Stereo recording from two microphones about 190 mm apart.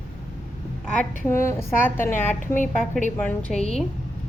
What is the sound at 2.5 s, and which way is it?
Speech, 40° left (ahead or behind).